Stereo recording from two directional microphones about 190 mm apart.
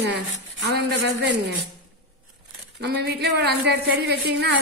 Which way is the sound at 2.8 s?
60° right (ahead or behind).